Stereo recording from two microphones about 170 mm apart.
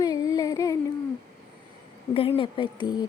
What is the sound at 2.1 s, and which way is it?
Speech, 35° left (ahead or behind).